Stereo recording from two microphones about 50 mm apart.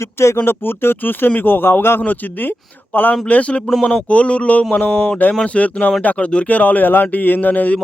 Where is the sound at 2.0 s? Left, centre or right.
Left.